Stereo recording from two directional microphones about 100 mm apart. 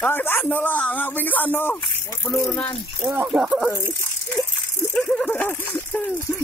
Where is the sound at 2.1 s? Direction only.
30° left (ahead or behind).